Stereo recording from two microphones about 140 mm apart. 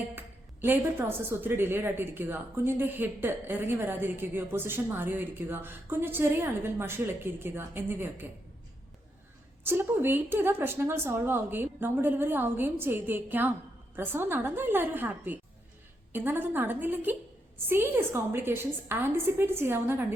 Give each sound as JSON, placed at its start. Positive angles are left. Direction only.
{"t": 0.2, "sound": "a woman's voice", "side_deg": -15}
{"t": 9.6, "sound": "a woman's voice", "side_deg": -15}